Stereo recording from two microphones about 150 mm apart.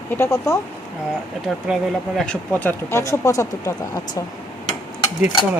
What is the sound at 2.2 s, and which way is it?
Speech, 10° left (ahead or behind).